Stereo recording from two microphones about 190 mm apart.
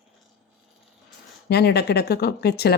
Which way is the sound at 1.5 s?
60° left (ahead or behind).